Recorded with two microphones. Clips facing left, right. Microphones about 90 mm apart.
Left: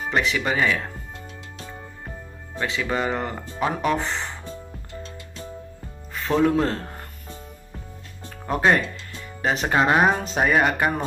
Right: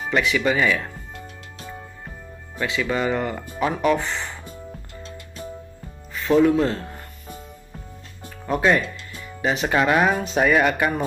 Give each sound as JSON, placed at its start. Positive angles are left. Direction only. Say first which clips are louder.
{"t": 0.1, "sound": "speech", "louder": "right 3 dB", "side_deg": 30}
{"t": 2.5, "sound": "speech", "louder": "right 1 dB", "side_deg": 30}
{"t": 6.1, "sound": "speech", "louder": "right 3 dB", "side_deg": 40}
{"t": 8.5, "sound": "speech", "louder": "even", "side_deg": 40}